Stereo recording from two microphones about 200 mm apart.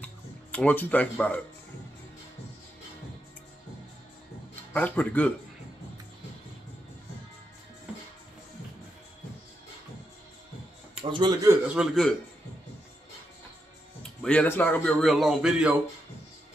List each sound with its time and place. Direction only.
0.0 s music: 5° left (ahead or behind)
4.7 s speech: 10° left (ahead or behind)
11.0 s speech: 25° right (ahead or behind)
11.6 s a man's voice: 5° right (ahead or behind)
14.2 s a man's voice: 5° left (ahead or behind)